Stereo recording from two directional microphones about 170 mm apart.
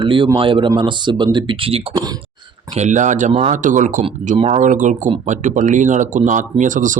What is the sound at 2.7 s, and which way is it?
A man's voice, 45° right (ahead or behind).